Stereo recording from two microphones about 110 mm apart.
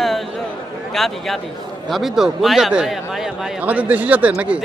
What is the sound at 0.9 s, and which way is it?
Speech, centre (ahead or behind).